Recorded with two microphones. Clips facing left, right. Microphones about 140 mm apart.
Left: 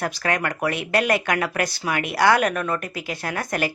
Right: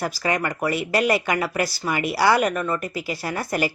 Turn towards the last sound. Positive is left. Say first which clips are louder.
# right 1 dB
turn(degrees=-5)  # may be behind; listen again after turning